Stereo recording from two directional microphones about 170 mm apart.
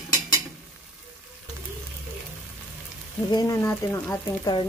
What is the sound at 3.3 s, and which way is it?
Speech, 20° left (ahead or behind).